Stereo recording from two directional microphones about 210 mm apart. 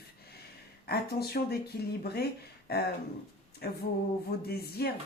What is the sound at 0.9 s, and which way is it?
Speech, 50° left (ahead or behind).